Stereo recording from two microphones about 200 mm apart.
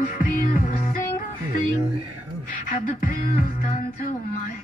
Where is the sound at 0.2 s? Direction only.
45° left (ahead or behind).